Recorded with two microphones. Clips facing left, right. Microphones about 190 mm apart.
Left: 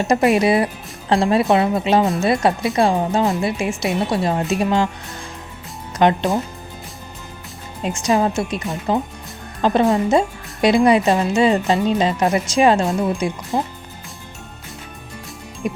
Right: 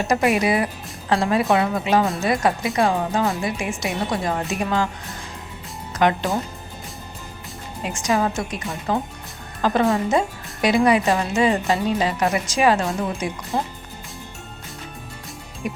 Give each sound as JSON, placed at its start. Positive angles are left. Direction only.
{"t": 0.1, "sound": "speech", "side_deg": 35}
{"t": 6.0, "sound": "speech", "side_deg": 25}
{"t": 8.1, "sound": "speech", "side_deg": 25}